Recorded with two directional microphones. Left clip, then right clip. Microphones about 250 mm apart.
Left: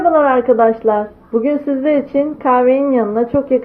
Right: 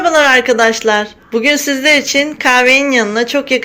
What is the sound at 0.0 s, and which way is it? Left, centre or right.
A woman's voice, right.